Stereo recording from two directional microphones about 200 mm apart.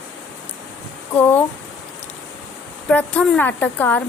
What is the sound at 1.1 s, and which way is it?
Speech, 10° left (ahead or behind).